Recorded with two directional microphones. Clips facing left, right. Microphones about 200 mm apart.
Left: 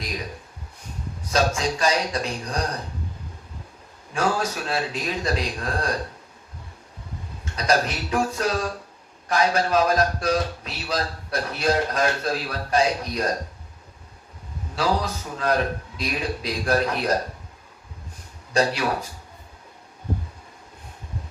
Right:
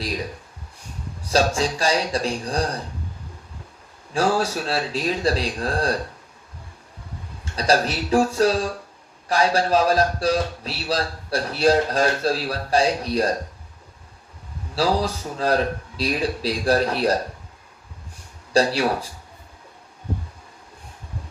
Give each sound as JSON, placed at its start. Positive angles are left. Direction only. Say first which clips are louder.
{"t": 1.3, "sound": "a man's voice", "louder": "right 2 dB", "side_deg": -30}
{"t": 4.1, "sound": "a man's voice", "louder": "right 3 dB", "side_deg": -30}
{"t": 7.5, "sound": "a man's voice", "louder": "right 2 dB", "side_deg": -30}
{"t": 14.8, "sound": "a man's voice", "louder": "right 3 dB", "side_deg": -30}
{"t": 18.5, "sound": "a man's voice", "louder": "right 3 dB", "side_deg": -30}